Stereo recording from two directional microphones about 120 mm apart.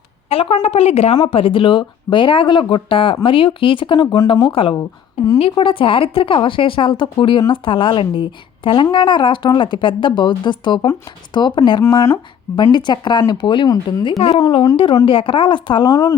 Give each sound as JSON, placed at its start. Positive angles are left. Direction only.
{"t": 0.3, "sound": "a woman's voice", "side_deg": 55}
{"t": 11.8, "sound": "speech", "side_deg": 30}
{"t": 14.2, "sound": "a woman's voice", "side_deg": 55}